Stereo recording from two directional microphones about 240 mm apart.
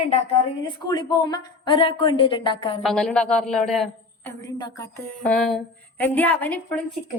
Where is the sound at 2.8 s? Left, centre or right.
Centre.